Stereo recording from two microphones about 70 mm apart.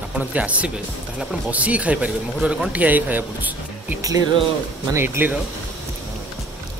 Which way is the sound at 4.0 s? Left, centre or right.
Right.